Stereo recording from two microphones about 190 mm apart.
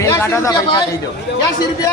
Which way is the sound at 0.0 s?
15° left (ahead or behind).